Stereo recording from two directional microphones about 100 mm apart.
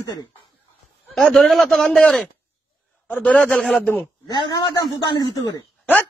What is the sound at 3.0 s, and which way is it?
Speech, 15° left (ahead or behind).